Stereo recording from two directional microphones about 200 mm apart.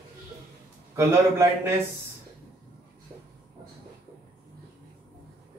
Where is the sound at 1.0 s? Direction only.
15° right (ahead or behind).